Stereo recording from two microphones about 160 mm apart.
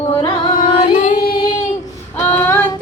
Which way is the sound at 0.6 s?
40° left (ahead or behind).